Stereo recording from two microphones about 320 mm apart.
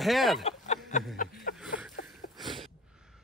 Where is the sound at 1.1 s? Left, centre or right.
Left.